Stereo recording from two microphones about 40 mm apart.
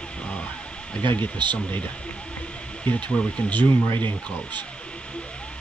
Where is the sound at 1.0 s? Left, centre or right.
Left.